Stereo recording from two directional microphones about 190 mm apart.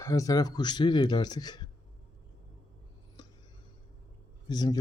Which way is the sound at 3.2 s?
25° left (ahead or behind).